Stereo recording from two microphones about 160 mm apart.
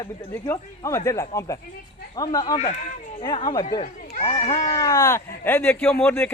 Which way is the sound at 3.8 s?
40° left (ahead or behind).